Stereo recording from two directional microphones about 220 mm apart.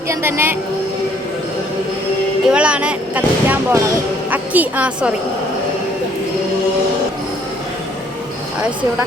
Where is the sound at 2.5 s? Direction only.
5° right (ahead or behind).